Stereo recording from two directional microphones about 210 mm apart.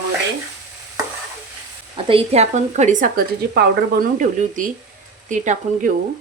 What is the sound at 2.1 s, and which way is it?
Speech, 30° right (ahead or behind).